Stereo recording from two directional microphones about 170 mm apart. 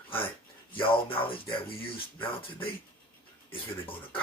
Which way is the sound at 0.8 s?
30° left (ahead or behind).